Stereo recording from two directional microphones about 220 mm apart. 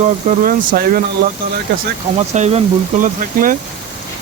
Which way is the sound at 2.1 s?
30° right (ahead or behind).